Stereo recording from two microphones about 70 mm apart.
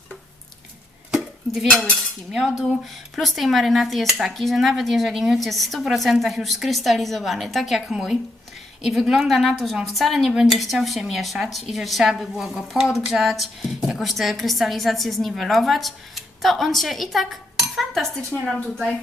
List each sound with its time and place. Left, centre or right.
2.3 s speech: centre